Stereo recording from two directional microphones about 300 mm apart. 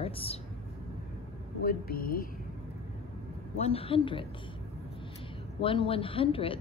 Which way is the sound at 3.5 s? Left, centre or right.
Centre.